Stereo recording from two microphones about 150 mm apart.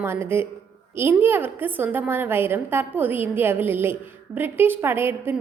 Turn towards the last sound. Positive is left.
turn(degrees=-15)  # may be behind; listen again after turning